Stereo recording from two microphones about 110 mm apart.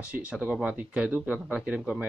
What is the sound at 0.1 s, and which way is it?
Speech, 10° right (ahead or behind).